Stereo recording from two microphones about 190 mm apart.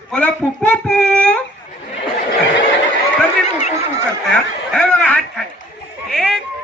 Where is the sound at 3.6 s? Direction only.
35° left (ahead or behind).